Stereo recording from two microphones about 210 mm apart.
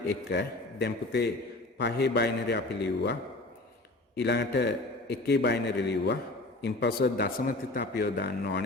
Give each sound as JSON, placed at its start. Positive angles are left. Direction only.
{"t": 0.1, "sound": "a man's voice", "side_deg": 55}